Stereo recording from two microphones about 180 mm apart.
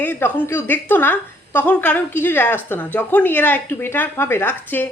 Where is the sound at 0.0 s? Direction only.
10° left (ahead or behind).